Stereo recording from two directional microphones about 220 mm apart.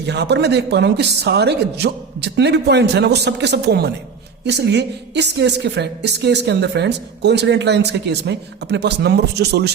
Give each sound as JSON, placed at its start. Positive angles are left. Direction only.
{"t": 0.0, "sound": "a woman's voice", "side_deg": -50}